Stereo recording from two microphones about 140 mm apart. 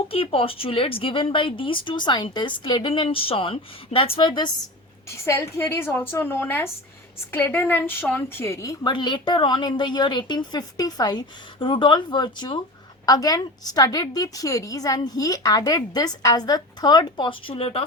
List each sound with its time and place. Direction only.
0.1 s speech: 40° left (ahead or behind)
5.0 s a woman's voice: 20° left (ahead or behind)
8.9 s a woman's voice: 35° left (ahead or behind)